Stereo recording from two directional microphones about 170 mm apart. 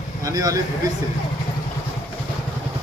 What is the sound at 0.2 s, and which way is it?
Speech, 20° right (ahead or behind).